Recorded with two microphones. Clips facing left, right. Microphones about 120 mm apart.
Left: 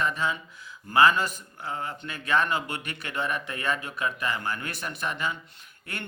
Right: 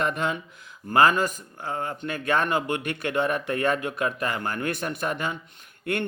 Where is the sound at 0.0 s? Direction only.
55° right (ahead or behind).